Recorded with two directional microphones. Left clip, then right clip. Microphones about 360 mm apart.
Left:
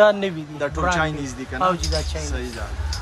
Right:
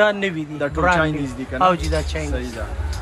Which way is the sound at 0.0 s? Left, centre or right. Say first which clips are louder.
Left 2 dB; centre.